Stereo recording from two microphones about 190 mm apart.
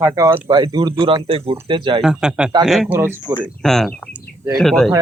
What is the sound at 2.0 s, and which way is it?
Speech, 5° right (ahead or behind).